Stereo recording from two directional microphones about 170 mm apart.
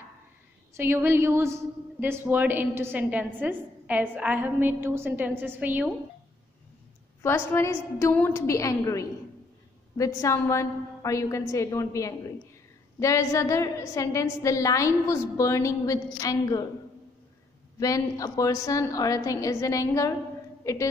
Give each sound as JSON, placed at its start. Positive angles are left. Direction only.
{"t": 0.7, "sound": "a woman's voice", "side_deg": -15}
{"t": 7.2, "sound": "a woman's voice", "side_deg": 15}
{"t": 17.7, "sound": "a woman's voice", "side_deg": 20}